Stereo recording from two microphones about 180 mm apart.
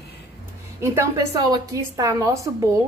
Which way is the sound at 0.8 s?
20° right (ahead or behind).